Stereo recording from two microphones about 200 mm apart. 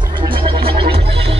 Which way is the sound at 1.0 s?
30° right (ahead or behind).